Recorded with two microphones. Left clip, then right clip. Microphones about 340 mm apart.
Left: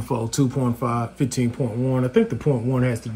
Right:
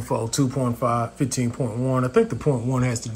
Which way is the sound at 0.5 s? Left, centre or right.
Left.